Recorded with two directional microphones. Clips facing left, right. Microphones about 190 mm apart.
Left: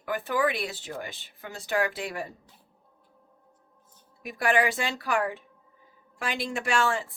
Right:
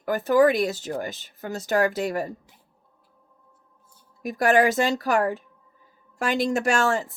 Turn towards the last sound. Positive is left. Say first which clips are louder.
# right 4 dB
turn(degrees=-40)  # may be behind; listen again after turning